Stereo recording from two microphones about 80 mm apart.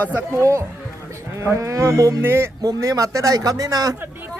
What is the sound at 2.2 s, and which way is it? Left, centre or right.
Speech, right.